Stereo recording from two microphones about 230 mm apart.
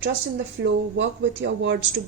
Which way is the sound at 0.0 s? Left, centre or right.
Right.